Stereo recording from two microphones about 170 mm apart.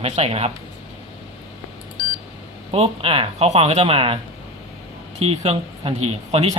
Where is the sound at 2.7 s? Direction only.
35° right (ahead or behind).